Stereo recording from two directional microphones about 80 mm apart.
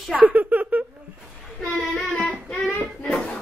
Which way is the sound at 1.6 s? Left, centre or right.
Centre.